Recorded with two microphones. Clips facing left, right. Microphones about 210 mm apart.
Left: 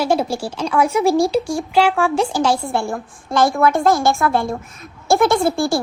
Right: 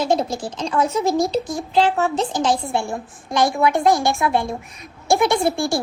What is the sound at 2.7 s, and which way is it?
Speech, 55° left (ahead or behind).